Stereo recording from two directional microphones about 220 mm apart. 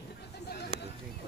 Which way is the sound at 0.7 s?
25° left (ahead or behind).